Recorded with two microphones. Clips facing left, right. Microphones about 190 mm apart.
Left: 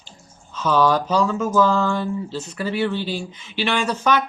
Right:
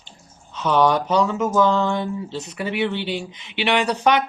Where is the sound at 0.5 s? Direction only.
20° right (ahead or behind).